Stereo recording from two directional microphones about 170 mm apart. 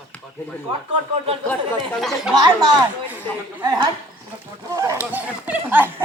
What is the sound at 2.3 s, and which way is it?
Speech, 25° right (ahead or behind).